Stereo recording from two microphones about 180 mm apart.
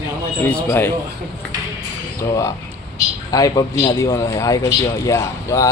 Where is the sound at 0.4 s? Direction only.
15° left (ahead or behind).